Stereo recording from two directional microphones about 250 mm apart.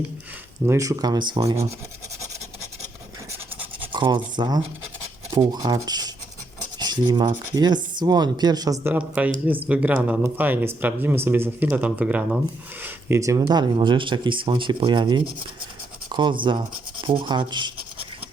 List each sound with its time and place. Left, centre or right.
0.6 s speech: centre
3.9 s speech: centre
6.7 s cutlery: centre
7.5 s speech: centre